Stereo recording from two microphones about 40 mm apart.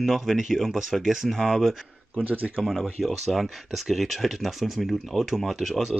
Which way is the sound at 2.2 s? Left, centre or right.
Right.